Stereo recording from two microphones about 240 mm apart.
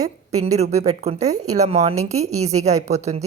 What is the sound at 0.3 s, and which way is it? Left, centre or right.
A woman's voice, right.